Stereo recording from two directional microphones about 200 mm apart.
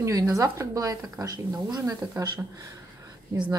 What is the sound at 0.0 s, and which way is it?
Speech, 15° right (ahead or behind).